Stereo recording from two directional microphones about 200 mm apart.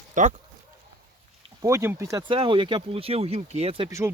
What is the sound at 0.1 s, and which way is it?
Speech, 40° right (ahead or behind).